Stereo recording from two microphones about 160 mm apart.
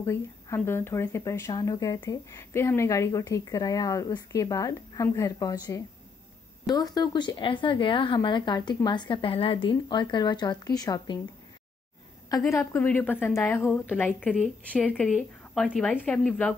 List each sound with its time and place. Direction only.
0.0 s speech: 15° left (ahead or behind)
12.3 s a woman's voice: 20° left (ahead or behind)